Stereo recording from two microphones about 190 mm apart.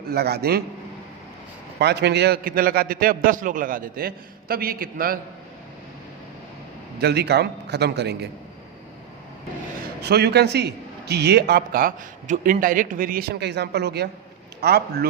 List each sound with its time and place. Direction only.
0.1 s a man's voice: 55° right (ahead or behind)
1.8 s a man's voice: 60° right (ahead or behind)
7.0 s a man's voice: 60° right (ahead or behind)
10.0 s a man's voice: 60° right (ahead or behind)